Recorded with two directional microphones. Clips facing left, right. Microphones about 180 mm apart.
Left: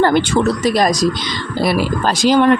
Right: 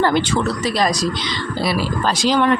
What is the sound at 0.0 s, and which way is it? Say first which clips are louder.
Speech: left 4 dB; 50° left (ahead or behind).